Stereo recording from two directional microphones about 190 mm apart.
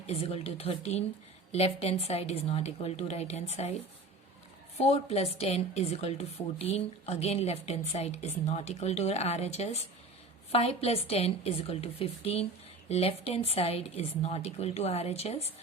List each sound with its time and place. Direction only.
0.1 s a woman's voice: 30° left (ahead or behind)
4.8 s a woman's voice: 35° left (ahead or behind)